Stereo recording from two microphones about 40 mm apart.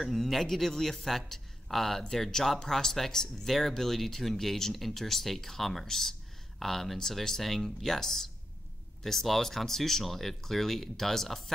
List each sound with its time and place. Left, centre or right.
0.0 s speech: centre